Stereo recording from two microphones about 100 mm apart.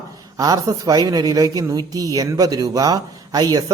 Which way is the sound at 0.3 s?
40° right (ahead or behind).